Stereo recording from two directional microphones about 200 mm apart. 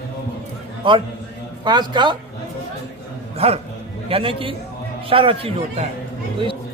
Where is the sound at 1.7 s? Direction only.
20° right (ahead or behind).